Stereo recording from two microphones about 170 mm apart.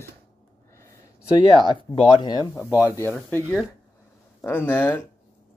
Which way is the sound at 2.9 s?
15° left (ahead or behind).